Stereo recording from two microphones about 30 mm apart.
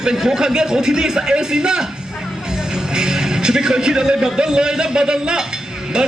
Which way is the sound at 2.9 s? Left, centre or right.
Right.